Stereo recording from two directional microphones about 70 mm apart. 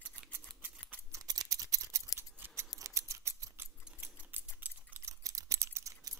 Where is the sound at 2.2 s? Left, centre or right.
Right.